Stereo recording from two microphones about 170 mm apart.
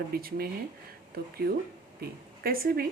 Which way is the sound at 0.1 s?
60° right (ahead or behind).